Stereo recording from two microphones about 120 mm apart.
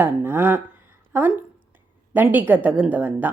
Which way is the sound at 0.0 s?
15° right (ahead or behind).